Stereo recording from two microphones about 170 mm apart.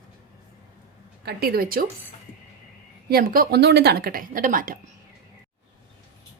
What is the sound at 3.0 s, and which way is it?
Speech, 60° right (ahead or behind).